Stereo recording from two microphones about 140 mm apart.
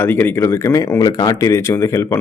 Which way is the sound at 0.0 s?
15° left (ahead or behind).